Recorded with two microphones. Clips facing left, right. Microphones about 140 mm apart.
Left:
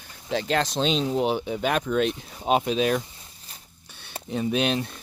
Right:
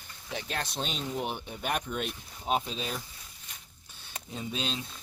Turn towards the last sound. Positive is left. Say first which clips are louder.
# left 11 dB
turn(degrees=70)  # may be behind; listen again after turning